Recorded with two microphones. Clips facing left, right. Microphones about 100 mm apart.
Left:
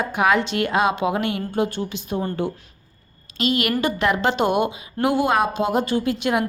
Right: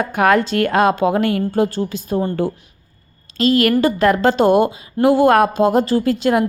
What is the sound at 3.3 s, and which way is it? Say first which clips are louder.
Speech: right 7 dB; 40° right (ahead or behind).